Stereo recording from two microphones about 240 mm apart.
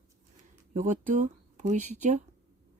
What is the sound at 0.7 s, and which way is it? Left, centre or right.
Speech, right.